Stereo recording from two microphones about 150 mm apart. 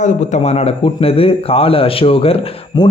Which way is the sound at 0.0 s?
50° left (ahead or behind).